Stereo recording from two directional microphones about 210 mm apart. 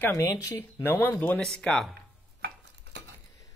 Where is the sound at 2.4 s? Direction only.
55° right (ahead or behind).